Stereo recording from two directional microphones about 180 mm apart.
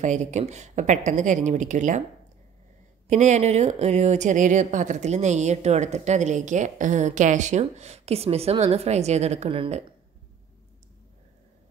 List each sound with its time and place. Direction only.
0.0 s speech: 40° right (ahead or behind)
3.1 s speech: 40° right (ahead or behind)